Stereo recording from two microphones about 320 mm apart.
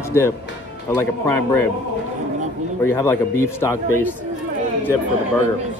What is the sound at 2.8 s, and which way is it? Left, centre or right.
A man's voice, centre.